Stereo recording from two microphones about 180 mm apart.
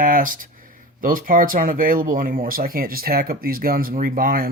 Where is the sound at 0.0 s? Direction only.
50° right (ahead or behind).